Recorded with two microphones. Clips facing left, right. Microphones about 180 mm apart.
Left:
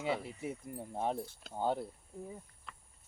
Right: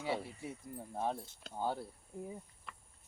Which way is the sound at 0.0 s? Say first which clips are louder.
Left 2 dB; 20° left (ahead or behind).